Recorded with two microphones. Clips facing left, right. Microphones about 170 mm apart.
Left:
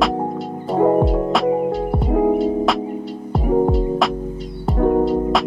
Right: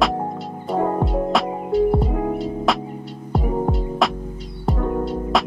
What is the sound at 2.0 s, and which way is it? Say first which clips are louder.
Music: left 7 dB; 25° left (ahead or behind).